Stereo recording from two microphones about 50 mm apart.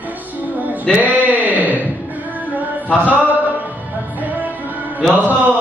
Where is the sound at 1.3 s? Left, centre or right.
Right.